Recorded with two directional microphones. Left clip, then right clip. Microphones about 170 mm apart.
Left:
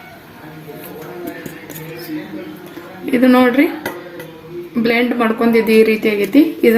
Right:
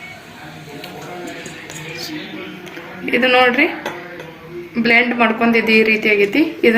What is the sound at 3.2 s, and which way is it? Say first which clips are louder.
Speech: even; 50° left (ahead or behind).